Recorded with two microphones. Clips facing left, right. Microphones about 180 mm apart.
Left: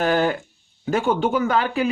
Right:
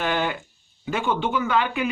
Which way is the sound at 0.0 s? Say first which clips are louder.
Left 5 dB; 40° left (ahead or behind).